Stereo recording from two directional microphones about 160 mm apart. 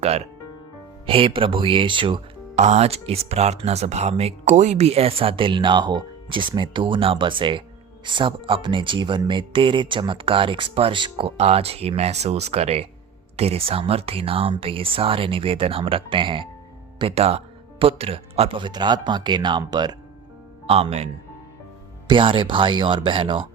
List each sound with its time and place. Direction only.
1.0 s speech: 35° right (ahead or behind)
2.6 s speech: 45° right (ahead or behind); by 20.0 s 25° right (ahead or behind)
20.7 s speech: 40° right (ahead or behind)